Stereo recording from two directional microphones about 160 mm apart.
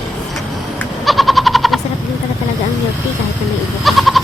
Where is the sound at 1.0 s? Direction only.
Centre (ahead or behind).